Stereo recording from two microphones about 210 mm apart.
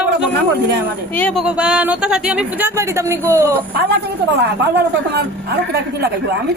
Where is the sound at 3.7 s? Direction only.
50° right (ahead or behind).